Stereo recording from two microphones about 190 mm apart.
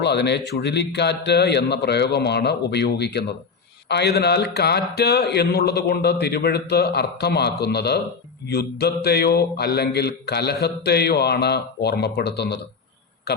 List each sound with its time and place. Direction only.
0.0 s speech: 60° left (ahead or behind)